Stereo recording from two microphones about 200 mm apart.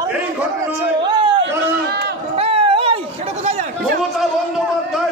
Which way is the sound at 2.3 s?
30° right (ahead or behind).